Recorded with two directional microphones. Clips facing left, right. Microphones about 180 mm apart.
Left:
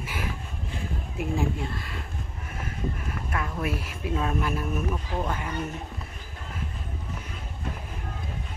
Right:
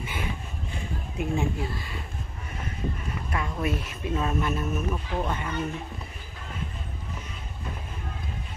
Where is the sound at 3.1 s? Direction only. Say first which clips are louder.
Even; centre (ahead or behind).